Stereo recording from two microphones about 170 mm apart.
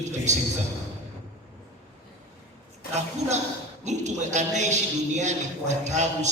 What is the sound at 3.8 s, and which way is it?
A man's voice, 45° right (ahead or behind).